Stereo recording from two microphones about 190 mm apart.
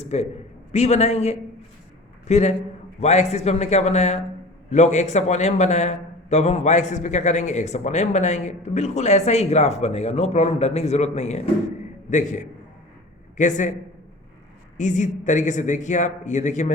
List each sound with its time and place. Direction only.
0.0 s a man's voice: 35° left (ahead or behind)
14.8 s a man's voice: 40° left (ahead or behind)